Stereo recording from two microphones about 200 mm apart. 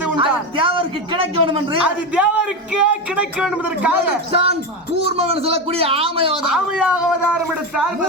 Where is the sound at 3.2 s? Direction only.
5° right (ahead or behind).